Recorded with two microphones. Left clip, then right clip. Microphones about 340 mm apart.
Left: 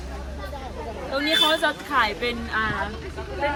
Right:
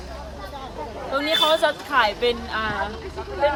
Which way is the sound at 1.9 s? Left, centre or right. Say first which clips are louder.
Right 4 dB; right.